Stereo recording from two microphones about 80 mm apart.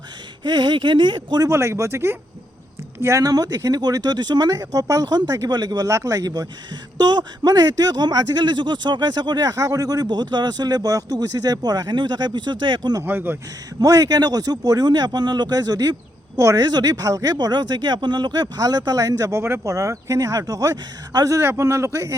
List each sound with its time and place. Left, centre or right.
0.4 s speech: right
1.5 s a man's voice: right
4.5 s a man's voice: right
13.0 s speech: right
13.8 s a man's voice: right
17.3 s speech: right
19.7 s a man's voice: right
21.3 s a man's voice: right